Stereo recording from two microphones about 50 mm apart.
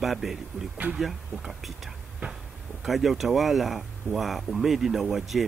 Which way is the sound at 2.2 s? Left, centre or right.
Right.